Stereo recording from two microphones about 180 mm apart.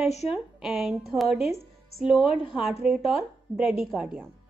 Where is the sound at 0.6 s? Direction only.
5° right (ahead or behind).